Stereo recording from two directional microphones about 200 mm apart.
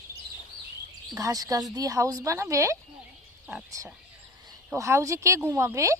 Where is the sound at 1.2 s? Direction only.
15° right (ahead or behind).